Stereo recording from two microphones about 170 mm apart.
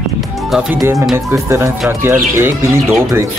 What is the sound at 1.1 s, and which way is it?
Speech, 15° right (ahead or behind).